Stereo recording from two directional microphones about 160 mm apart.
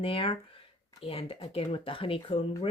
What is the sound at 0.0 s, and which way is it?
Speech, 35° left (ahead or behind).